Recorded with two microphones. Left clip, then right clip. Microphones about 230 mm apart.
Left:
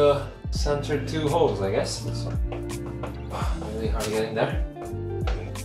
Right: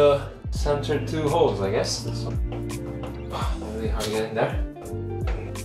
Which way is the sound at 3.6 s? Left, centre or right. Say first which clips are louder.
Even; centre.